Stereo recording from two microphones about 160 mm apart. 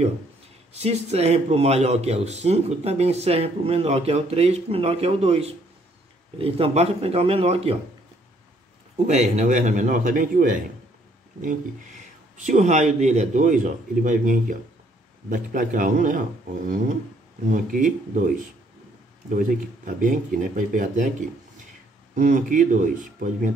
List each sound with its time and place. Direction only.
0.7 s speech: 40° right (ahead or behind)
8.9 s speech: 45° right (ahead or behind)
17.5 s speech: 55° right (ahead or behind)
19.3 s speech: 55° right (ahead or behind)
22.1 s speech: 55° right (ahead or behind)